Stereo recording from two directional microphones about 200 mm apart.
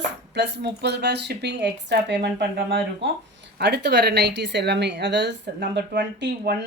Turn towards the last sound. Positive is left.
turn(degrees=-55)  # may be behind; listen again after turning